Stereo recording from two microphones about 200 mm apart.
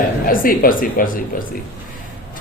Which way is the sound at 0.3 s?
45° left (ahead or behind).